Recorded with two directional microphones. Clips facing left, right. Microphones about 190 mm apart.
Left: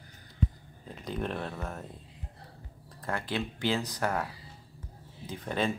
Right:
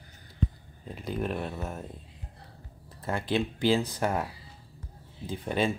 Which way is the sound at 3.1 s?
20° right (ahead or behind).